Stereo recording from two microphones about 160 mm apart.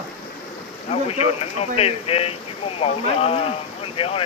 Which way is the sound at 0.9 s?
40° left (ahead or behind).